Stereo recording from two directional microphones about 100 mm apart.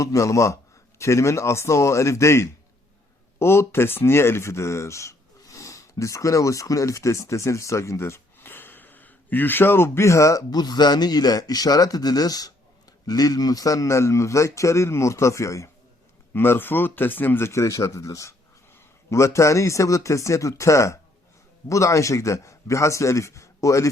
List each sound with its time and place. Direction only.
0.0 s a man's voice: 30° left (ahead or behind)